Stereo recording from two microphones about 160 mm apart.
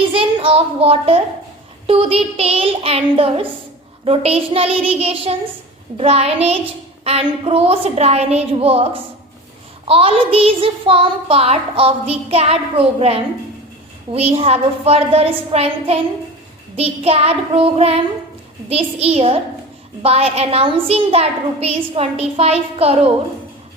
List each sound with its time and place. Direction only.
0.1 s a woman's voice: 35° right (ahead or behind)
1.9 s child singing: 35° right (ahead or behind)